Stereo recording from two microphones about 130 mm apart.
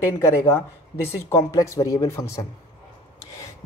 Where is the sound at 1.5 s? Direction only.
25° left (ahead or behind).